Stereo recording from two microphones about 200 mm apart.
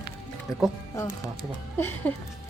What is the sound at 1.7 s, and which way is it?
Speech, 10° left (ahead or behind).